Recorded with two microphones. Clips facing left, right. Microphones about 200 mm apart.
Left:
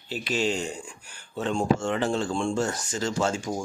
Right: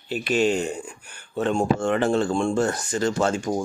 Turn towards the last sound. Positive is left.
turn(degrees=-60)  # may be behind; listen again after turning